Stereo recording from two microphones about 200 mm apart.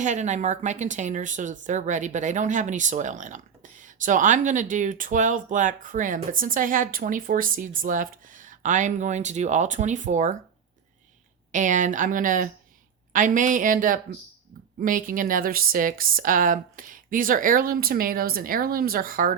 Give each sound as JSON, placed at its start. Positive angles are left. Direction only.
{"t": 0.0, "sound": "speech", "side_deg": -35}
{"t": 11.5, "sound": "a woman's voice", "side_deg": -40}